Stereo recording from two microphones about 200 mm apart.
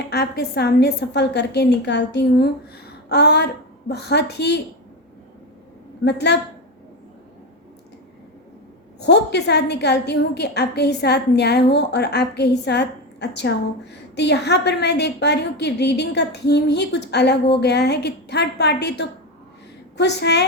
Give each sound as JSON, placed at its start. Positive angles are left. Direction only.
{"t": 0.1, "sound": "a woman's voice", "side_deg": 50}
{"t": 6.1, "sound": "a woman's voice", "side_deg": 55}
{"t": 9.0, "sound": "a woman's voice", "side_deg": 55}